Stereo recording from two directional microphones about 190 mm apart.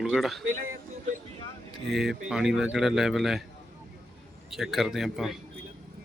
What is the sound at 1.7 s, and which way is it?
A man's voice, centre (ahead or behind).